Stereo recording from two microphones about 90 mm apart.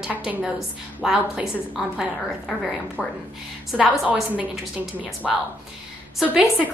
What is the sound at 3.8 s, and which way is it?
A woman's voice, 15° right (ahead or behind).